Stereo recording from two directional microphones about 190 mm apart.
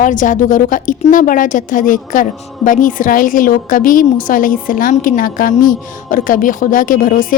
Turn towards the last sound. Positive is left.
turn(degrees=45)  # may be behind; listen again after turning